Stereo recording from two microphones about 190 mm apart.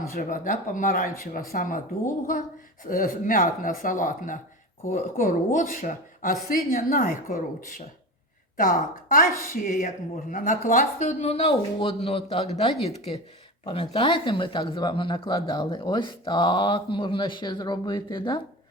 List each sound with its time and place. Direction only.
0.1 s speech: 45° left (ahead or behind)
2.8 s speech: 45° left (ahead or behind); by 12.5 s 30° left (ahead or behind)
13.7 s speech: 25° left (ahead or behind)